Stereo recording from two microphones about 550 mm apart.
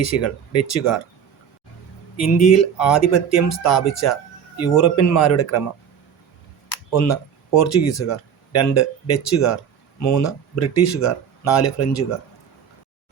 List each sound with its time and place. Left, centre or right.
0.0 s speech: left
2.1 s speech: left
7.6 s speech: left